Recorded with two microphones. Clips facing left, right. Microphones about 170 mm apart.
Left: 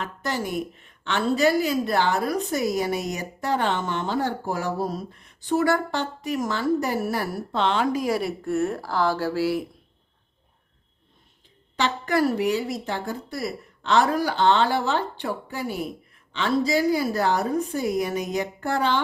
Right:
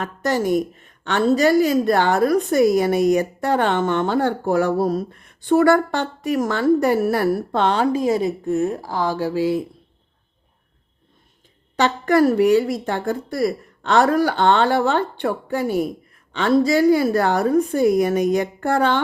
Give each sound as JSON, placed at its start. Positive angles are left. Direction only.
{"t": 0.0, "sound": "a woman's voice", "side_deg": -45}
{"t": 7.8, "sound": "speech", "side_deg": -25}
{"t": 11.8, "sound": "a woman's voice", "side_deg": -50}